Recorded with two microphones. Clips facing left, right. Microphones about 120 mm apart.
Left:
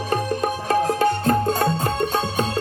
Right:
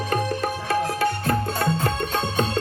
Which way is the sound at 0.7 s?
35° left (ahead or behind).